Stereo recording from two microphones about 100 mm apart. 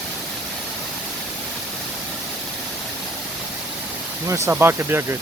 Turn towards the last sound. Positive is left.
turn(degrees=-25)  # may be behind; listen again after turning